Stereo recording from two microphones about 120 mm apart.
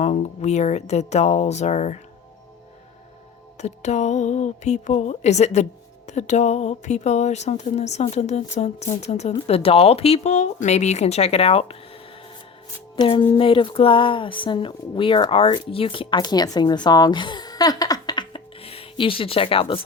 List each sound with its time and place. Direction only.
0.0 s speech: 65° left (ahead or behind)
3.6 s speech: 70° left (ahead or behind)
9.5 s speech: 55° left (ahead or behind)